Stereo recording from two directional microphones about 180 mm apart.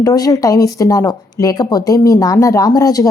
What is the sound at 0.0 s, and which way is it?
Speech, 20° left (ahead or behind).